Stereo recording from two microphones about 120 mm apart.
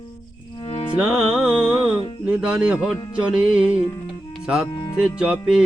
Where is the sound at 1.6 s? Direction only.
10° right (ahead or behind).